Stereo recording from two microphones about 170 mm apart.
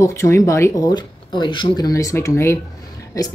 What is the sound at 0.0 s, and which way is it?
Speech, 15° left (ahead or behind).